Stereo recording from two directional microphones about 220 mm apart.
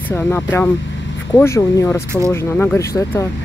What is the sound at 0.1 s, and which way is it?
Speech, 10° left (ahead or behind).